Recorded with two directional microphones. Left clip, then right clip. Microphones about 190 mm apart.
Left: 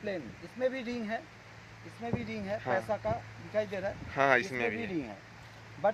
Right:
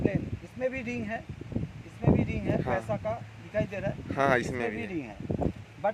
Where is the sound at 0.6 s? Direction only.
35° right (ahead or behind).